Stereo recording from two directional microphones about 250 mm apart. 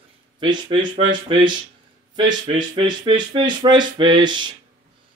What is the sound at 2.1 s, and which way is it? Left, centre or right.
Speech, centre.